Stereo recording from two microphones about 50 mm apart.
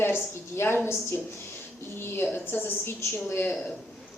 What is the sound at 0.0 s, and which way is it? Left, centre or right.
Speech, left.